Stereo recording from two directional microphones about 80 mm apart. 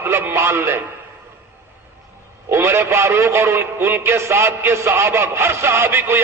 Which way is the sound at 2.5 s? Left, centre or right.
Right.